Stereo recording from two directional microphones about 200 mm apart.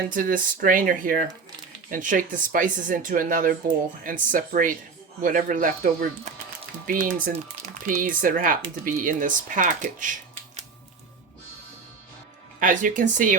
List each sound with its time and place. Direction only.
0.1 s speech: 45° right (ahead or behind)
12.5 s speech: 40° right (ahead or behind)